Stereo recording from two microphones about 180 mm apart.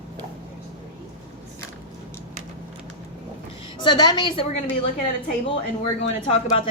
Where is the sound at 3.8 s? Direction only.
25° left (ahead or behind).